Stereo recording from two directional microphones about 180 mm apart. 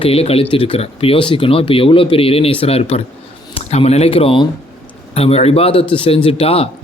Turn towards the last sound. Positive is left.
turn(degrees=35)  # may be behind; listen again after turning